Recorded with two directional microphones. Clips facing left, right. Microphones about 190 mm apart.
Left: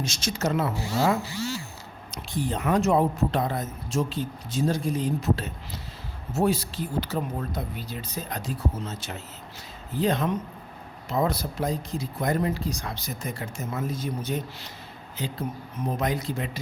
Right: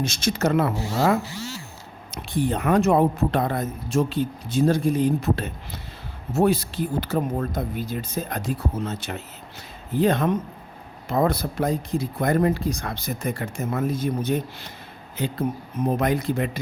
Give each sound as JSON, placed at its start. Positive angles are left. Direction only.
{"t": 0.0, "sound": "speech", "side_deg": -55}
{"t": 2.1, "sound": "speech", "side_deg": -60}
{"t": 15.9, "sound": "speech", "side_deg": -55}